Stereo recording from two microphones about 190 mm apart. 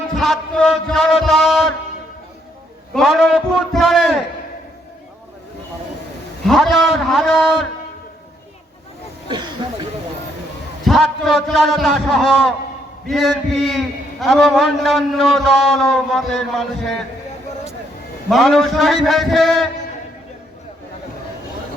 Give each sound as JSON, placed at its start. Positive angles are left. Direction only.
{"t": 0.1, "sound": "a man's voice", "side_deg": 0}
{"t": 2.9, "sound": "a man's voice", "side_deg": 0}
{"t": 6.4, "sound": "a man's voice", "side_deg": 0}
{"t": 9.3, "sound": "a sound", "side_deg": -25}
{"t": 10.8, "sound": "a man's voice", "side_deg": 0}
{"t": 18.3, "sound": "a man's voice", "side_deg": 0}